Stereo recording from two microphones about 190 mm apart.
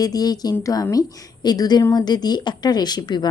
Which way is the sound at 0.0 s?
20° left (ahead or behind).